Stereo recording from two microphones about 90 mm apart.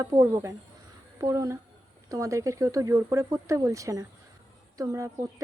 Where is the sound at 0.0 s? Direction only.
35° right (ahead or behind).